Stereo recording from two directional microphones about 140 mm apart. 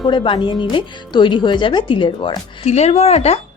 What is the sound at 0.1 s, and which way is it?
Speech, 35° left (ahead or behind).